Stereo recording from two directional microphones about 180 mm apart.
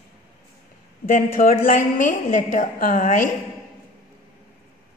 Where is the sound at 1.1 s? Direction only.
50° left (ahead or behind).